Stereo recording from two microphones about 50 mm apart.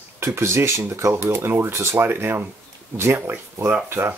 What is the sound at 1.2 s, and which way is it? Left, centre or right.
Speech, right.